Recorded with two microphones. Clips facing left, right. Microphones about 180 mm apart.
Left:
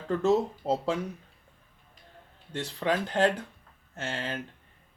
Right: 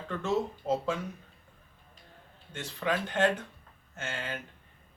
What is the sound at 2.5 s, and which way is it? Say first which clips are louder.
Speech: left 3 dB; 35° left (ahead or behind).